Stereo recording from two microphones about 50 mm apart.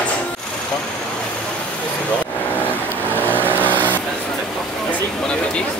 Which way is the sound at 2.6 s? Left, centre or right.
Left.